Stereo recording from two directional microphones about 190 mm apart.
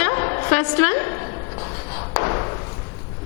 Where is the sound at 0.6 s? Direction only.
10° left (ahead or behind).